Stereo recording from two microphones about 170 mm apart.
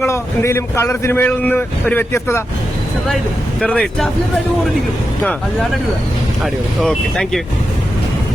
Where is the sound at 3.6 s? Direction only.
5° left (ahead or behind).